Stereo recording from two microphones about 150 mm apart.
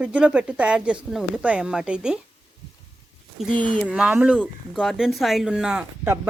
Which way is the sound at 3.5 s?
30° right (ahead or behind).